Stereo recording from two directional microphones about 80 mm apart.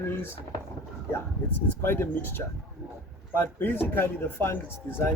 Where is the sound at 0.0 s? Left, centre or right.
Left.